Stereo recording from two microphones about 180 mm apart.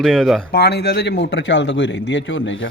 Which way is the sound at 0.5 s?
65° left (ahead or behind).